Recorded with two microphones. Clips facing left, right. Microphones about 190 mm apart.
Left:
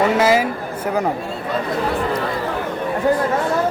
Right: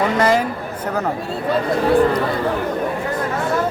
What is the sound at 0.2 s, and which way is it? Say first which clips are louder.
Speech: left 1 dB; 5° left (ahead or behind).